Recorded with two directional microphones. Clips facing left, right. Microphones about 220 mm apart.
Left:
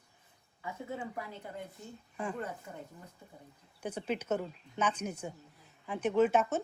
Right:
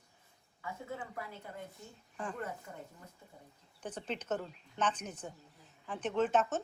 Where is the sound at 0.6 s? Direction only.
20° left (ahead or behind).